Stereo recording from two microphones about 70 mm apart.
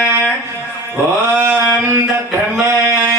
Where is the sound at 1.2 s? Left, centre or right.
Right.